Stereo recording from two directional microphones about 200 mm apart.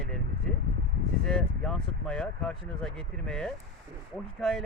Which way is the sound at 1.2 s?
5° left (ahead or behind).